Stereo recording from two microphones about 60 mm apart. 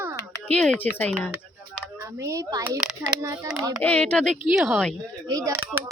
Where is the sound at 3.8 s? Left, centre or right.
Left.